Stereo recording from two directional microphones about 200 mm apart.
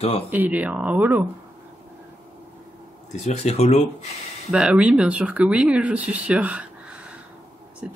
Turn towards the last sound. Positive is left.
turn(degrees=-5)  # may be behind; listen again after turning